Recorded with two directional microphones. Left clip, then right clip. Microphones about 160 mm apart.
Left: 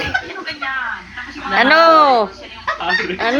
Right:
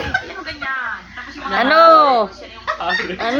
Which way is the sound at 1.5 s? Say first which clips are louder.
Even; 10° right (ahead or behind).